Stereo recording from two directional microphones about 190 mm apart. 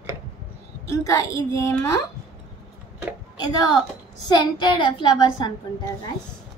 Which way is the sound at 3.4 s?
20° left (ahead or behind).